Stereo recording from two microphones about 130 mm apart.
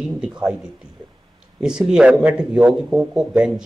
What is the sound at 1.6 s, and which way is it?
Speech, 5° right (ahead or behind).